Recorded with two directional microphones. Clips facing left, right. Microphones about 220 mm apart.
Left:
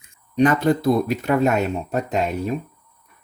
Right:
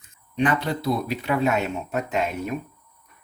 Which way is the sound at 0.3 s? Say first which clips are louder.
Left 6 dB; 45° left (ahead or behind).